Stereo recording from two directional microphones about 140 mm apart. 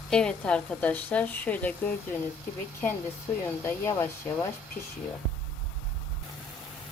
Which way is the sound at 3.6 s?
15° left (ahead or behind).